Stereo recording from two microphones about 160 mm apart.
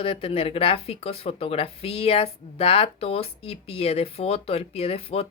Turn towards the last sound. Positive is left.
turn(degrees=40)  # may be behind; listen again after turning